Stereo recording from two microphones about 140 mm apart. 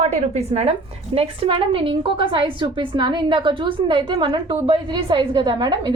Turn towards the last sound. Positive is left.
turn(degrees=-30)  # may be behind; listen again after turning